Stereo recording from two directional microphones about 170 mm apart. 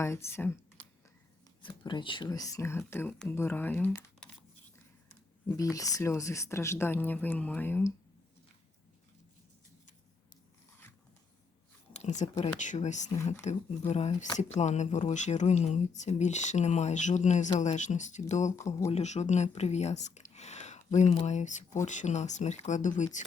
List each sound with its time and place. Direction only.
0.0 s speech: 15° left (ahead or behind)
1.6 s speech: 25° left (ahead or behind); by 4.3 s 10° left (ahead or behind)
5.5 s speech: 20° left (ahead or behind)
11.9 s speech: 45° left (ahead or behind)
18.5 s speech: 15° left (ahead or behind)
18.9 s speech: 40° left (ahead or behind)